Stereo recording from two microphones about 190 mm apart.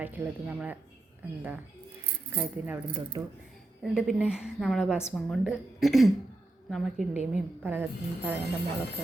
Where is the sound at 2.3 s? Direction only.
10° right (ahead or behind).